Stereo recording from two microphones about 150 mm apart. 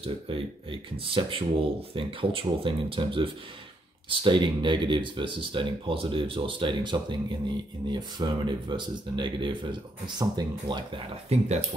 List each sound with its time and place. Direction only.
0.0 s speech: 35° right (ahead or behind)
11.2 s speech: 50° right (ahead or behind)